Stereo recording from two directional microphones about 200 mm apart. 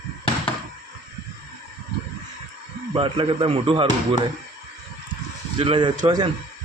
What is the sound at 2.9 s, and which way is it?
Speech, 25° right (ahead or behind).